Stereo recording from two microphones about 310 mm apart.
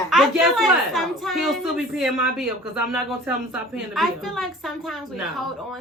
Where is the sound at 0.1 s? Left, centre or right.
Centre.